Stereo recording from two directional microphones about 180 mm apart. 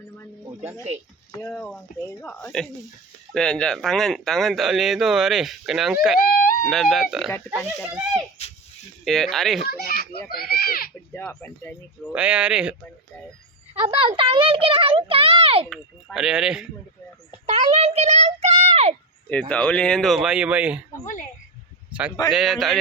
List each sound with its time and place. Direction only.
0.4 s a sound: 10° right (ahead or behind)
1.4 s speech: 5° left (ahead or behind)
6.1 s run: 50° left (ahead or behind)
6.7 s speech: centre (ahead or behind)
9.0 s speech: centre (ahead or behind)
9.6 s a child's voice: 55° left (ahead or behind)
11.1 s speech: 15° left (ahead or behind)
12.1 s speech: 5° right (ahead or behind)
13.8 s a child's voice: 30° right (ahead or behind)
15.7 s speech: centre (ahead or behind)
17.4 s a child's voice: 35° right (ahead or behind)
19.3 s speech: 5° left (ahead or behind)
21.9 s speech: 5° right (ahead or behind)